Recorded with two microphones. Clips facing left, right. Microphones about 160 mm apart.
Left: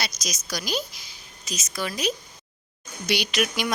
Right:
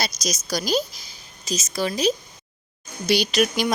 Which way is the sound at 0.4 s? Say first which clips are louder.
Right 6 dB; 40° right (ahead or behind).